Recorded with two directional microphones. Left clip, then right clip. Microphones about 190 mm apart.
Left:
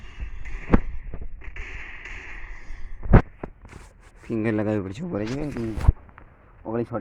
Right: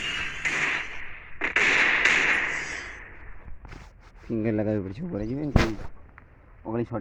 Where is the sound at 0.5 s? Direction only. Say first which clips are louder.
Left 3 dB; 55° right (ahead or behind).